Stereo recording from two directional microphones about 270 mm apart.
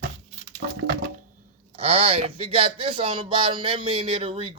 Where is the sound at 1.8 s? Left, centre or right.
Right.